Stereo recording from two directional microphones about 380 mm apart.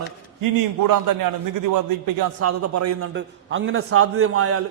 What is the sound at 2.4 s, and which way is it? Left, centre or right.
Speech, right.